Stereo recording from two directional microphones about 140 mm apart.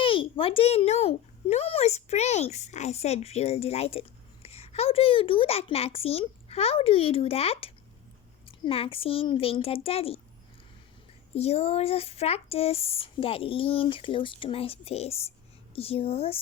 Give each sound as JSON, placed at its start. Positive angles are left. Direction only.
{"t": 0.0, "sound": "speech", "side_deg": 40}
{"t": 11.3, "sound": "speech", "side_deg": 45}